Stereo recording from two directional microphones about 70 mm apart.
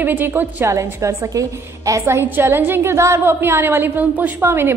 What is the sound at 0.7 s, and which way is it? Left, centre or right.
A woman's voice, right.